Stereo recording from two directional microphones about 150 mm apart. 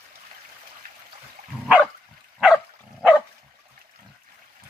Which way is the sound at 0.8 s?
90° right.